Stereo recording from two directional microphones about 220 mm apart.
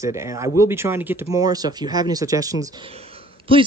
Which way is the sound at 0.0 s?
15° right (ahead or behind).